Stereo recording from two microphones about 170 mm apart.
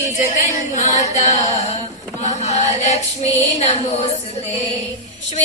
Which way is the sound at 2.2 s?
40° left (ahead or behind).